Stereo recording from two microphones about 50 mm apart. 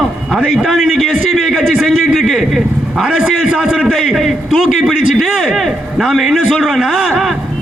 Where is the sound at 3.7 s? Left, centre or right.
Centre.